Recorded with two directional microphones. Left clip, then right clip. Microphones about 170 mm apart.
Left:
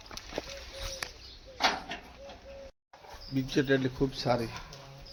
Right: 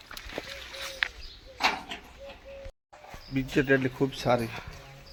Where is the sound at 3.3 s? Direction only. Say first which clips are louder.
Right 3 dB; 25° right (ahead or behind).